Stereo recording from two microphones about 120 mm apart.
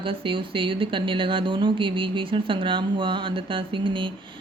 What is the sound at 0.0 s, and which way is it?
Speech, 45° right (ahead or behind).